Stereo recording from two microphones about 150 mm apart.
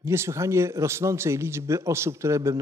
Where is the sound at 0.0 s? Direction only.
20° right (ahead or behind).